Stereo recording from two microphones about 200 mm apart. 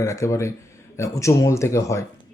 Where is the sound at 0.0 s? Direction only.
15° left (ahead or behind).